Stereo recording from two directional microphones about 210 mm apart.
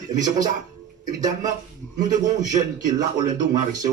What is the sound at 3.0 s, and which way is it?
Speech, 35° right (ahead or behind).